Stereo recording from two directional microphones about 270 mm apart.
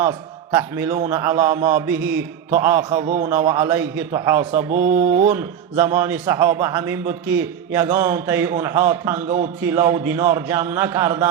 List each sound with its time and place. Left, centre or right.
0.0 s a man's voice: centre
4.7 s mantra: right
5.2 s a man's voice: centre